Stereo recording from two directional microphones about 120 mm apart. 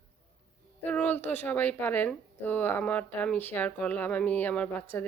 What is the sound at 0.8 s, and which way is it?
Speech, 15° left (ahead or behind).